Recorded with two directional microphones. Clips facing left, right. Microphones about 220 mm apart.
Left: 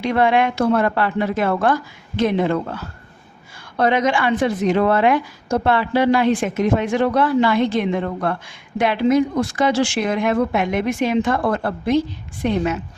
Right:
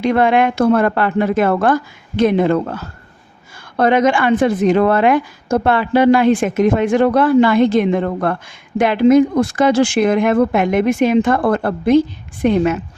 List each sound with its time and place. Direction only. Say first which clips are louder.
0.0 s speech: right 4 dB; 50° right (ahead or behind)